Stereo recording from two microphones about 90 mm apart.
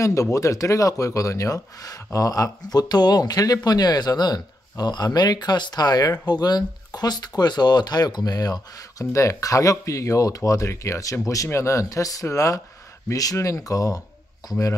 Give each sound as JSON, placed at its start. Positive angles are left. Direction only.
{"t": 0.0, "sound": "speech", "side_deg": 35}